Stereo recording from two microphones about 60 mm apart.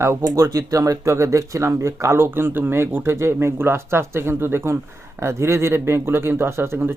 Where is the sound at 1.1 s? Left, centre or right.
Right.